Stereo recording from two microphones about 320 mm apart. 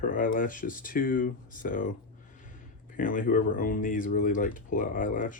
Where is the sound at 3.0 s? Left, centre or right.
Left.